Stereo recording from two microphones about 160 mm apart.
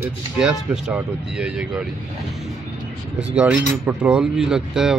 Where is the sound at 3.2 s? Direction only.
5° right (ahead or behind).